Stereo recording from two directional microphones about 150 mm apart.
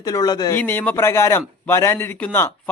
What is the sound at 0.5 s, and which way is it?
A man's voice, 15° left (ahead or behind).